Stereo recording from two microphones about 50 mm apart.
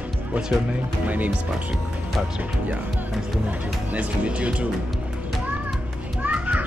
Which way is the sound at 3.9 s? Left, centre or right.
Right.